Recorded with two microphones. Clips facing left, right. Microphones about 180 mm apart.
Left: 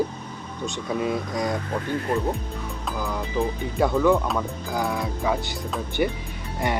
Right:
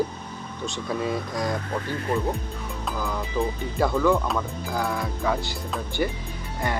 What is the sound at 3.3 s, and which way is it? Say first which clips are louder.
Speech: left 2 dB; 15° left (ahead or behind).